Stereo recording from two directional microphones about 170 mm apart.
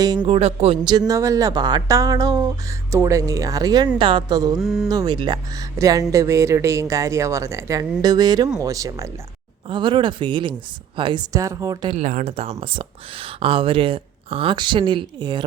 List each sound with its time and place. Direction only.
0.3 s speech: 35° right (ahead or behind)
4.6 s speech: centre (ahead or behind)
4.9 s speech: 25° right (ahead or behind)
11.9 s speech: 45° right (ahead or behind); by 15.4 s 25° right (ahead or behind)